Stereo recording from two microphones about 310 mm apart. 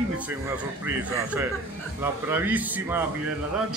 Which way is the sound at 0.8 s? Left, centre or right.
Centre.